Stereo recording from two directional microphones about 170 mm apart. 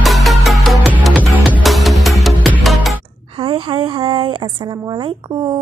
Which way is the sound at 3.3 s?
30° right (ahead or behind).